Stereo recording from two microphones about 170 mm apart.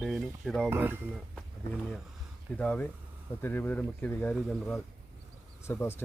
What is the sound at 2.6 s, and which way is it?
Speech, 10° left (ahead or behind).